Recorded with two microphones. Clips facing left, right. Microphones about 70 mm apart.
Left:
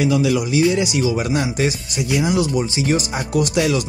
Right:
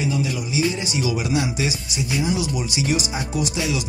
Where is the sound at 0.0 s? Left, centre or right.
Left.